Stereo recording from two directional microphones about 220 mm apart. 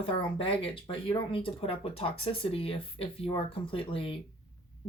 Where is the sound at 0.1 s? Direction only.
25° left (ahead or behind).